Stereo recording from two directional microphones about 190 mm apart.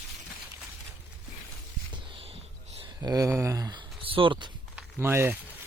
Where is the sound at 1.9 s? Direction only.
25° right (ahead or behind).